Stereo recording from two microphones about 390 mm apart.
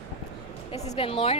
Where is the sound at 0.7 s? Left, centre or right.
Centre.